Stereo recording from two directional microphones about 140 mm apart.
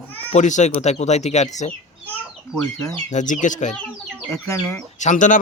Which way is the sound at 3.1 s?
65° left (ahead or behind).